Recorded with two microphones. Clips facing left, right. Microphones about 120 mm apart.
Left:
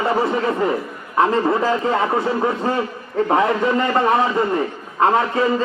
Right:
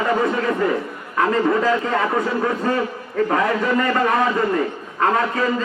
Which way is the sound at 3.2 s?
25° left (ahead or behind).